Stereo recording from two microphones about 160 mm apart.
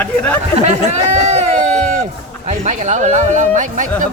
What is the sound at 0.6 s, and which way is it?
Speech, 45° right (ahead or behind).